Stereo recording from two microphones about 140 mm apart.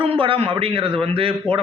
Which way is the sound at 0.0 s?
40° right (ahead or behind).